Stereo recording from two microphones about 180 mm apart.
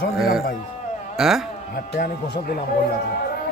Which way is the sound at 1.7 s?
55° left (ahead or behind).